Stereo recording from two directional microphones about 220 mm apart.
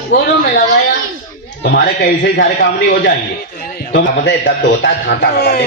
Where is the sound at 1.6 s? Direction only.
50° left (ahead or behind).